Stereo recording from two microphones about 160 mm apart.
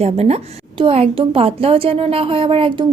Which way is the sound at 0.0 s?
40° right (ahead or behind).